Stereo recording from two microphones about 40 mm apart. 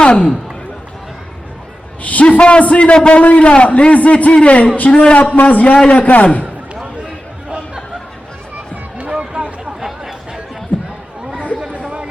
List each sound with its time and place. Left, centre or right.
0.0 s speech: left
2.0 s a man's voice: left
5.1 s a man's voice: left
5.7 s a man's voice: left
6.1 s a man's voice: left
8.7 s music: right
9.8 s chatter: centre
11.5 s chatter: right